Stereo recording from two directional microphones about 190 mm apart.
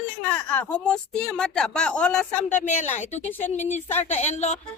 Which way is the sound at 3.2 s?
10° left (ahead or behind).